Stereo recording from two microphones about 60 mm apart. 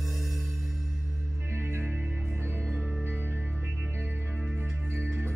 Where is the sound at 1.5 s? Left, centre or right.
Right.